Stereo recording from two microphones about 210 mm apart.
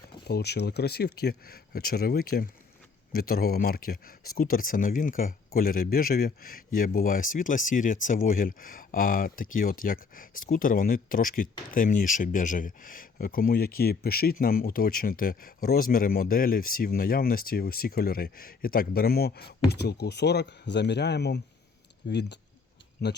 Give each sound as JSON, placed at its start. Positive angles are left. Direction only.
{"t": 0.3, "sound": "speech", "side_deg": 50}